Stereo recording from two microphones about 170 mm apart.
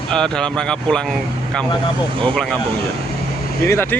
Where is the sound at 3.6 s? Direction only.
15° left (ahead or behind).